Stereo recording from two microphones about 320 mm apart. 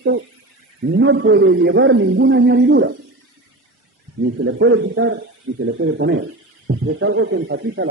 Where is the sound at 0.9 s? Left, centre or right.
Right.